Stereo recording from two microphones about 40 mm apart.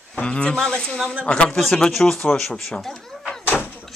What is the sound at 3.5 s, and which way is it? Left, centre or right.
Door, left.